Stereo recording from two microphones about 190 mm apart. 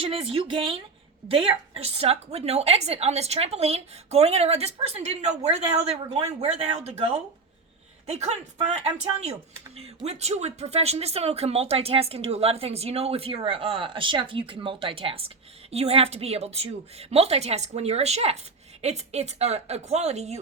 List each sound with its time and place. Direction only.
0.0 s speech: 30° right (ahead or behind)